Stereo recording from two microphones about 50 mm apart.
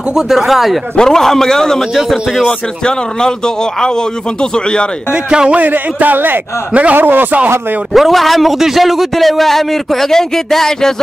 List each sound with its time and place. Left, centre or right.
0.1 s a man's voice: centre
0.9 s a man's voice: centre
5.1 s speech: centre
5.6 s a man's voice: right
6.7 s speech: right
7.0 s a man's voice: right
7.9 s a man's voice: centre